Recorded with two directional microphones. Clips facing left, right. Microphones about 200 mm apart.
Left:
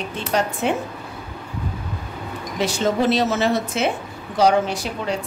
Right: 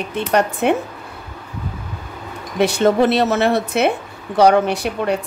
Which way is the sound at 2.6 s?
60° right (ahead or behind).